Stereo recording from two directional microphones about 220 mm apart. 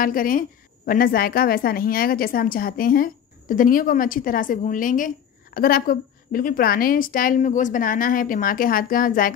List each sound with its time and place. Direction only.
0.0 s a woman's voice: 40° left (ahead or behind)